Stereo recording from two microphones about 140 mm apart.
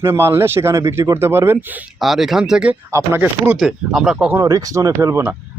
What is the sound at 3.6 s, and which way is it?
Speech, centre (ahead or behind).